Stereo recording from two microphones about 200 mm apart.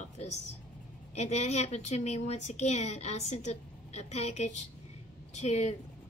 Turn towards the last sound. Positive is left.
turn(degrees=35)  # may be behind; listen again after turning